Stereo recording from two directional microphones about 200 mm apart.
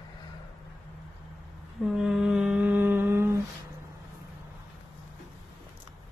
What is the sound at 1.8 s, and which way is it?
Mantra, centre (ahead or behind).